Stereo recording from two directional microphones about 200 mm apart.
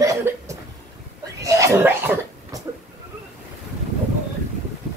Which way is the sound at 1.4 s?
15° right (ahead or behind).